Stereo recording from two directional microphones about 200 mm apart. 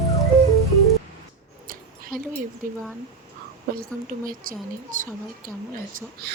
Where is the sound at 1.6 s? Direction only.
45° right (ahead or behind).